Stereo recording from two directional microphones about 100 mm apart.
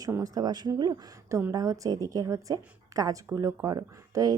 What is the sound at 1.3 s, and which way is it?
Speech, 30° right (ahead or behind).